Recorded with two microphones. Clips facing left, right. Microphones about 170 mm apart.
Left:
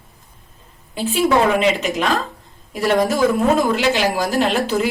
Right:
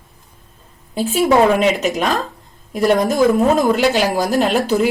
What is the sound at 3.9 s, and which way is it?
Speech, 40° right (ahead or behind).